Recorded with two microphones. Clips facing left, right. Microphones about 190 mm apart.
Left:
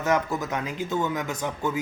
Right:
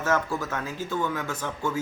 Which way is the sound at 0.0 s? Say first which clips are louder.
Left 1 dB; 20° left (ahead or behind).